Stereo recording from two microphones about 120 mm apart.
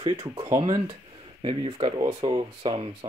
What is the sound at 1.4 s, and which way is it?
Speech, 50° right (ahead or behind).